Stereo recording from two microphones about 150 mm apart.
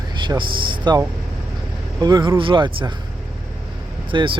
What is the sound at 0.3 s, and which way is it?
Speech, 30° right (ahead or behind).